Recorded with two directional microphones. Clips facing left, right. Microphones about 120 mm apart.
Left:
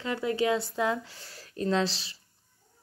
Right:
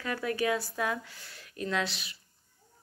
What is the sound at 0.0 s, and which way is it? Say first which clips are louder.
Speech: left 3 dB; 25° left (ahead or behind).